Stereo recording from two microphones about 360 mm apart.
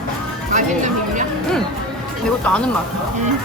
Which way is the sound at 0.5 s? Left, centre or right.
Right.